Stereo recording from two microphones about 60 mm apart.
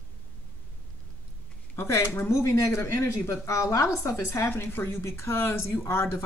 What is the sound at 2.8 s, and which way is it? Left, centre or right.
Speech, left.